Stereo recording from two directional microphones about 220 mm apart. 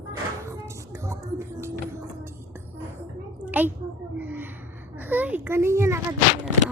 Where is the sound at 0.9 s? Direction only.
15° right (ahead or behind).